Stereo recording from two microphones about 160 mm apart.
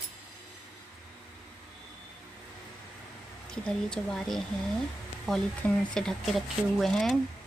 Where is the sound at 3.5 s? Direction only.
5° left (ahead or behind).